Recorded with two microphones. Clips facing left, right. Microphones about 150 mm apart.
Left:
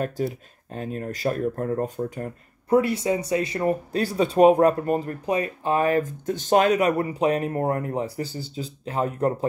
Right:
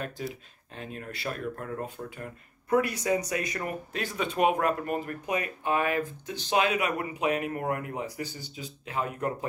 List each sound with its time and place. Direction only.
0.7 s speech: 40° left (ahead or behind)
2.7 s speech: 25° left (ahead or behind)